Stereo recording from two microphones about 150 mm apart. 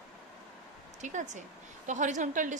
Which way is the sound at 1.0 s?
55° right (ahead or behind).